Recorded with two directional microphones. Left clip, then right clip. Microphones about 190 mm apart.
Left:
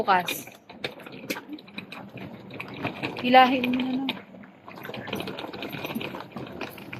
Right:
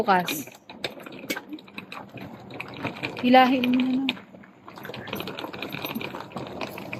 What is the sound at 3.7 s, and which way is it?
Speech, 20° left (ahead or behind).